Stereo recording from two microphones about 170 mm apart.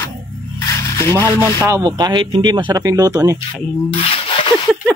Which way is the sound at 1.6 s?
20° right (ahead or behind).